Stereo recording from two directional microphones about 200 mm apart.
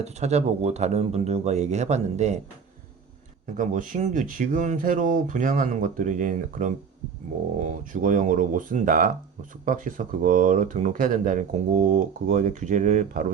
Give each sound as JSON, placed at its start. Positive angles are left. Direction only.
{"t": 0.0, "sound": "speech", "side_deg": -35}
{"t": 3.6, "sound": "speech", "side_deg": -40}